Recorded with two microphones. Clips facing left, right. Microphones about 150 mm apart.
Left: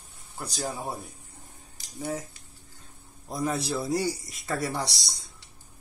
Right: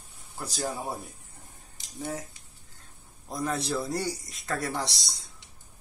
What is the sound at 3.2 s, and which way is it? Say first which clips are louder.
A man's voice: left 1 dB; 5° left (ahead or behind).